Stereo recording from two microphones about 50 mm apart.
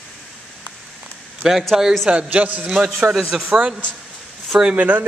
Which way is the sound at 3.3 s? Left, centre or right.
Centre.